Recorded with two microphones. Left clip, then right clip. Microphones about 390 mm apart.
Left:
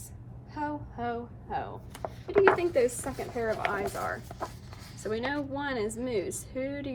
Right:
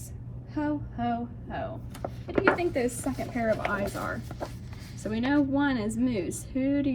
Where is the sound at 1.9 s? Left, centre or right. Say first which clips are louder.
Left 5 dB; centre.